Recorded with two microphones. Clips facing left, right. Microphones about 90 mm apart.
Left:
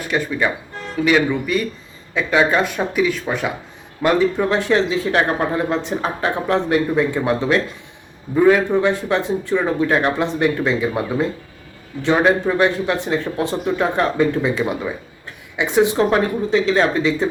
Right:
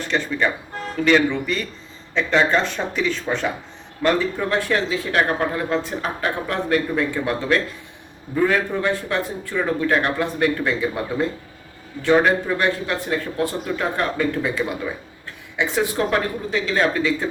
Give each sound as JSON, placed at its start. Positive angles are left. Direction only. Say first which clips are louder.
{"t": 0.0, "sound": "speech", "louder": "left 1 dB", "side_deg": 10}
{"t": 12.0, "sound": "speech", "louder": "left 1 dB", "side_deg": 15}